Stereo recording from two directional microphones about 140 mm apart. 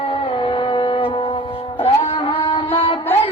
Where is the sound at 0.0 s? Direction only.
40° left (ahead or behind).